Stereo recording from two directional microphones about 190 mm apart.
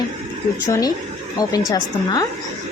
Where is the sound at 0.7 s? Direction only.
20° left (ahead or behind).